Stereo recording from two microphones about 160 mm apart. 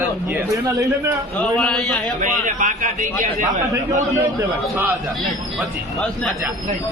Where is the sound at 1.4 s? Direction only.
5° left (ahead or behind).